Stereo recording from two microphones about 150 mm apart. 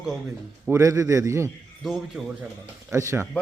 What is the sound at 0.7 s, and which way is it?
Speech, 20° right (ahead or behind).